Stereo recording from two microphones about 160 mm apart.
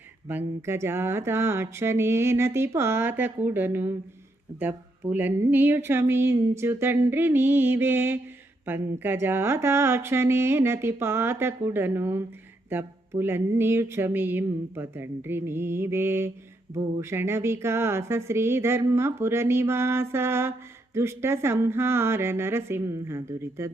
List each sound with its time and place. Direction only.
0.3 s speech: 15° right (ahead or behind)